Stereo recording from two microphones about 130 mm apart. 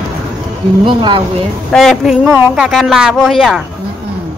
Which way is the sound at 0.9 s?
35° right (ahead or behind).